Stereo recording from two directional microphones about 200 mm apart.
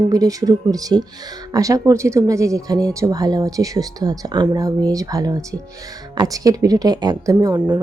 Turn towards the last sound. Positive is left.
turn(degrees=-15)  # may be behind; listen again after turning